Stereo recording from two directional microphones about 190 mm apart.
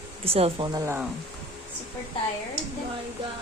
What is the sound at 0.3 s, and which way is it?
Speech, 30° right (ahead or behind).